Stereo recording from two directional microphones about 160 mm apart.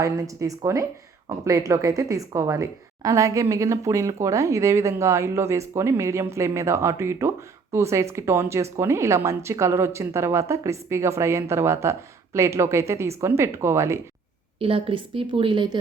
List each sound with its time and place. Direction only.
0.0 s a woman's voice: 20° right (ahead or behind)
14.6 s a woman's voice: 35° right (ahead or behind)